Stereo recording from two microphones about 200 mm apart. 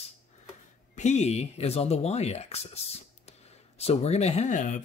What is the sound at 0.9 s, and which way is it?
Speech, 35° left (ahead or behind).